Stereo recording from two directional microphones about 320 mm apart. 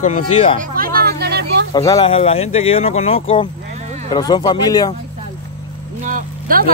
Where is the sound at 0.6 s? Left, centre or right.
Right.